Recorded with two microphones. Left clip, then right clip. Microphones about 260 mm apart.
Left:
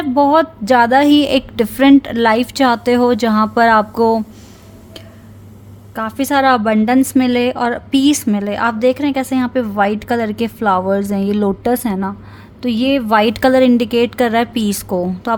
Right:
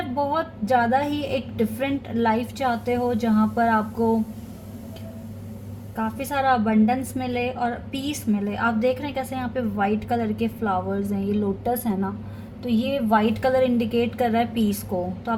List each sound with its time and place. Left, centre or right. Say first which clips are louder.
0.2 s a woman's voice: left 13 dB; left
6.1 s a woman's voice: left 9 dB; left